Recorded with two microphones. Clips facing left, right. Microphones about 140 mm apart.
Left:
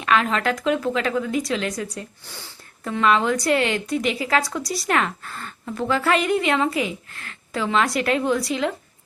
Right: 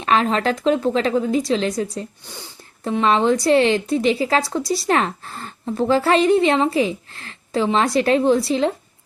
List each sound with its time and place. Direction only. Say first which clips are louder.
0.0 s speech: right 3 dB; 30° right (ahead or behind)
2.3 s speech: right 3 dB; 20° right (ahead or behind)